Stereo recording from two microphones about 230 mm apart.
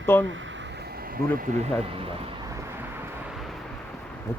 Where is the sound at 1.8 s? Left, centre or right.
Right.